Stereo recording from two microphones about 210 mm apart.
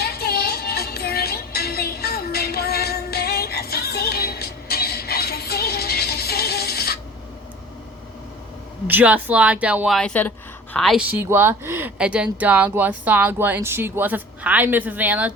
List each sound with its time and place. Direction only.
0.0 s music: 50° left (ahead or behind)
8.9 s speech: 5° right (ahead or behind)